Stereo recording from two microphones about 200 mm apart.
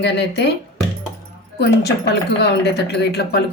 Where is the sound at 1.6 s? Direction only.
55° left (ahead or behind).